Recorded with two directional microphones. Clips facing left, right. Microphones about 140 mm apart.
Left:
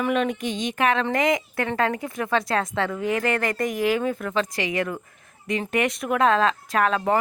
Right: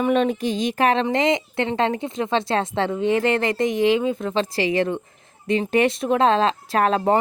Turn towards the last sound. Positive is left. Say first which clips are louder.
# right 3 dB
turn(degrees=-35)  # may be behind; listen again after turning